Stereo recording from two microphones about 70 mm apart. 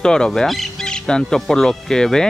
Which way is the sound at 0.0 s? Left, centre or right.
Centre.